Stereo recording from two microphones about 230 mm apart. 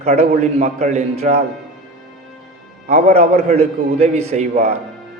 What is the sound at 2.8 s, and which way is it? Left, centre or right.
A man's voice, right.